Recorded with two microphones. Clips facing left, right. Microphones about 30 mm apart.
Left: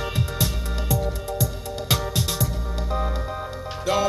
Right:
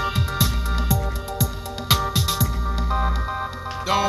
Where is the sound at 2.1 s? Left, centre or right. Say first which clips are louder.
Right 2 dB; right.